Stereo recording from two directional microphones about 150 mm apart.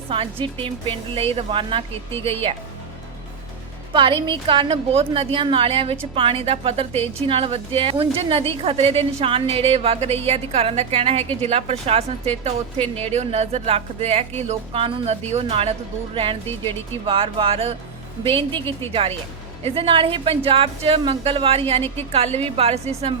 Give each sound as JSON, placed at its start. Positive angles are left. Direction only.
{"t": 0.1, "sound": "a woman's voice", "side_deg": -35}
{"t": 3.9, "sound": "a woman's voice", "side_deg": -35}